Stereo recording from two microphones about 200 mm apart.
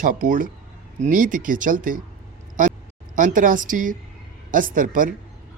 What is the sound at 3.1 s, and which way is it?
Speech, 40° right (ahead or behind).